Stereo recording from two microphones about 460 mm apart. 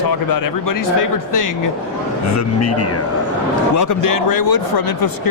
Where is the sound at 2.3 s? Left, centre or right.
Left.